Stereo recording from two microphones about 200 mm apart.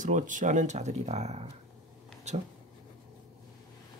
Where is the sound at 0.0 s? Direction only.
40° right (ahead or behind).